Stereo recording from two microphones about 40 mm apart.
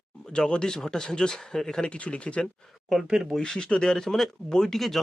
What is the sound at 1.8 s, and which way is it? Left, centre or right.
Speech, left.